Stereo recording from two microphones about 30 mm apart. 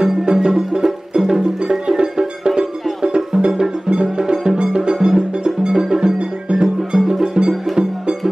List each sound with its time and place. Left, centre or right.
0.0 s music: right